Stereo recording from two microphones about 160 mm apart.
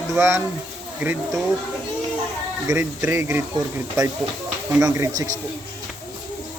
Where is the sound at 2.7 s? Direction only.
20° right (ahead or behind).